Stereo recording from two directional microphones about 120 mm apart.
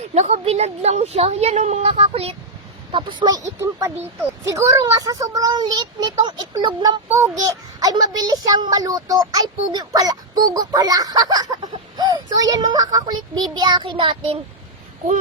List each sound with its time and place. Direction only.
0.1 s a woman's voice: 65° right (ahead or behind)
2.9 s a child's voice: 40° right (ahead or behind)